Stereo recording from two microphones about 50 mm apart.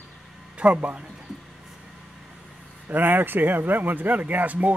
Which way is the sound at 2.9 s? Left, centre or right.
Right.